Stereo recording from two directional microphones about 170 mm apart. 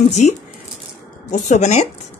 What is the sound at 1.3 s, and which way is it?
Speech, 45° left (ahead or behind).